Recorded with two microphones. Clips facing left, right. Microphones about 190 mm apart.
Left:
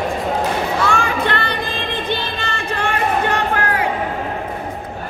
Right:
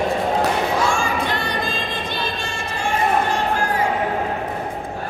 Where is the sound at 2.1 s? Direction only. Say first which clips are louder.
Left 3 dB; 60° left (ahead or behind).